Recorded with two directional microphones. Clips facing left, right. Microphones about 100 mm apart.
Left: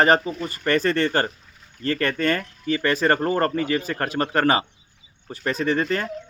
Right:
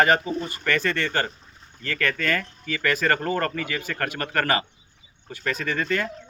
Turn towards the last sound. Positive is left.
turn(degrees=35)  # may be behind; listen again after turning